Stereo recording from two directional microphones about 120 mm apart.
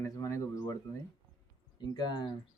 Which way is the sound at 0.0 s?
25° left (ahead or behind).